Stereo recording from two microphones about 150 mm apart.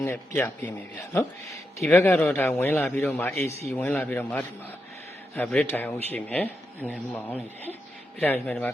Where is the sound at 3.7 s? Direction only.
10° left (ahead or behind).